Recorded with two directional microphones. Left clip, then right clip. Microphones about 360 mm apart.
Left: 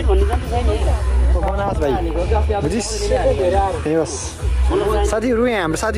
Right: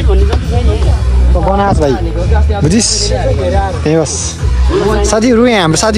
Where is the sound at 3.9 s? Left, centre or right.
Centre.